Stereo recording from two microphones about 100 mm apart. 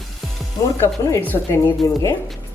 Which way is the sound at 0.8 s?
20° left (ahead or behind).